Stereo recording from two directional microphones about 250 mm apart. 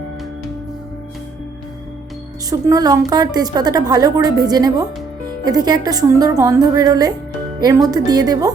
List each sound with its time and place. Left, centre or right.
2.5 s a woman's voice: centre